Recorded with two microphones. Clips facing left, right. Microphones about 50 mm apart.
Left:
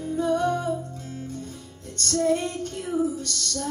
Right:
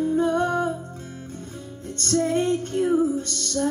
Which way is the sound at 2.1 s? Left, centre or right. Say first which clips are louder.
Right 2 dB; right.